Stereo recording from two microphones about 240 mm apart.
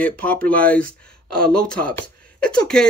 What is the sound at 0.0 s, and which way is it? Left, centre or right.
Speech, centre.